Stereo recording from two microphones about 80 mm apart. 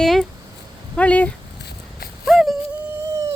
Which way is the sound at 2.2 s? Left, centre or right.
Centre.